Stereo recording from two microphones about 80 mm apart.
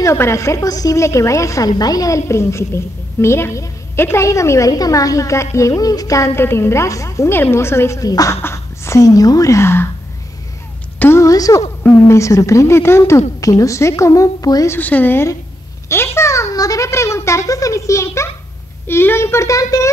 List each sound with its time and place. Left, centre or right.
0.0 s a woman's voice: left
1.7 s a woman's voice: left
8.1 s a woman's voice: left
8.4 s speech: left
11.1 s a woman's voice: left
14.8 s a woman's voice: left
15.9 s a woman's voice: left